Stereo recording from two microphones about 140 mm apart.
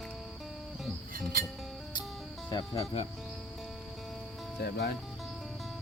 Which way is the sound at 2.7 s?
45° left (ahead or behind).